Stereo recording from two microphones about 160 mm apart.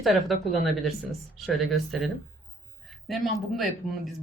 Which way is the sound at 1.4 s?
Centre (ahead or behind).